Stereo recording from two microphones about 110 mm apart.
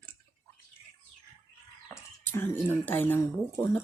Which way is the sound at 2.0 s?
20° left (ahead or behind).